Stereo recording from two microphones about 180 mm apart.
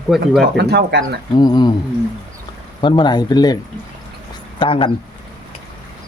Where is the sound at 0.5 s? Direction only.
65° right (ahead or behind).